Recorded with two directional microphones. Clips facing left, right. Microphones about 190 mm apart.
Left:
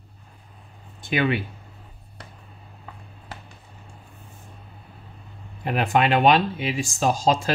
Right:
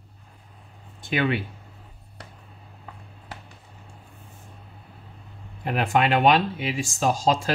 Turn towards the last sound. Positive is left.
turn(degrees=20)  # may be behind; listen again after turning